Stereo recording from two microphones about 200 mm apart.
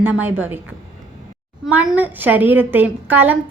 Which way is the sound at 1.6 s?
5° right (ahead or behind).